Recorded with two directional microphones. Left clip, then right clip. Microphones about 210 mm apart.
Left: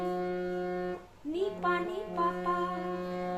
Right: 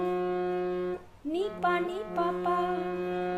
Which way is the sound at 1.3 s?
55° right (ahead or behind).